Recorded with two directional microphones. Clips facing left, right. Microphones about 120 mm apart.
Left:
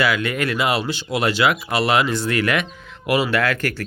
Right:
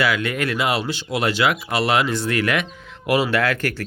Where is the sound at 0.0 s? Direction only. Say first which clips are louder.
Left 1 dB; centre (ahead or behind).